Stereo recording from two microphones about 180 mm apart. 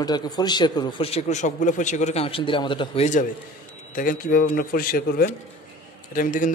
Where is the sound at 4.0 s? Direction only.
50° left (ahead or behind).